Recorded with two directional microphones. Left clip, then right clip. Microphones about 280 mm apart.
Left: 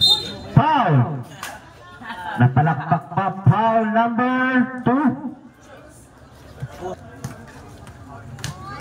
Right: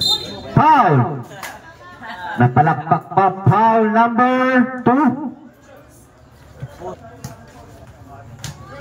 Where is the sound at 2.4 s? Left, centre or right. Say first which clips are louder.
Right 6 dB; right.